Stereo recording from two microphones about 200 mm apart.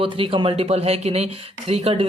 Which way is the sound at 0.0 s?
25° right (ahead or behind).